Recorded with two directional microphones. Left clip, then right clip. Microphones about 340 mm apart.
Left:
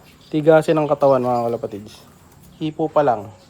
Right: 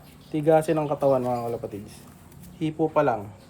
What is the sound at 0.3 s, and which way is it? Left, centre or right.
A man's voice, left.